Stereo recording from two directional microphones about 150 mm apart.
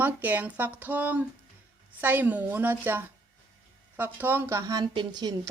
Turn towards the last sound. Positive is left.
turn(degrees=-30)  # may be behind; listen again after turning